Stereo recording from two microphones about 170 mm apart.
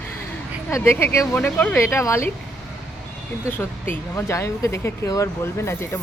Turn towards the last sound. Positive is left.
turn(degrees=15)  # may be behind; listen again after turning